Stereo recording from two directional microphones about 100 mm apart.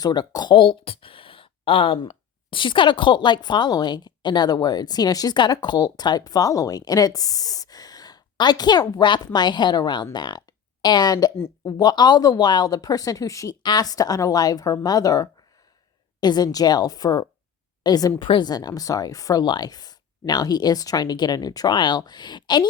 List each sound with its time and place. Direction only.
0.0 s a woman's voice: 45° left (ahead or behind)
13.6 s speech: 45° left (ahead or behind)
18.2 s speech: 50° left (ahead or behind)